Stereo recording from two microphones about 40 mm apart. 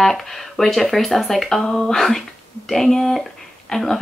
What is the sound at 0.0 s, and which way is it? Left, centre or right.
Speech, centre.